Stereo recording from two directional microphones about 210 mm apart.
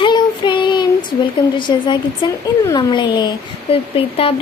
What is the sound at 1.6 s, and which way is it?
Speech, 20° left (ahead or behind).